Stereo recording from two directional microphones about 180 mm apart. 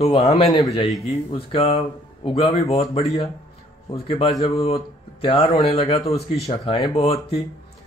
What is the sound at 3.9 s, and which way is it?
Speech, 30° left (ahead or behind).